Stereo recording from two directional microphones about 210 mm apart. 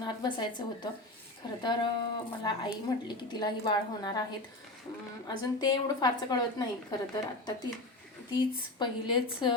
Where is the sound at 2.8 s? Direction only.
20° left (ahead or behind).